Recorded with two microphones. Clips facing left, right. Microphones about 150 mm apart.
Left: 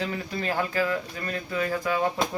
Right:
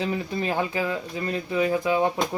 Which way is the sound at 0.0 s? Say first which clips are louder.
Right 3 dB; 20° right (ahead or behind).